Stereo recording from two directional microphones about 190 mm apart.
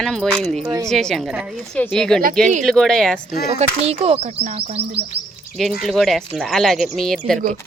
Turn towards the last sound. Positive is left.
turn(degrees=0)  # may be behind; listen again after turning